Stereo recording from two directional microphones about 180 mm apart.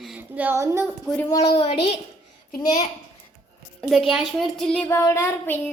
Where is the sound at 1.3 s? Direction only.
25° left (ahead or behind).